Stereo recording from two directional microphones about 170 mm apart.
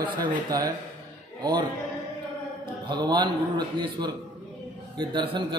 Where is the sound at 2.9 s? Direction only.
25° right (ahead or behind).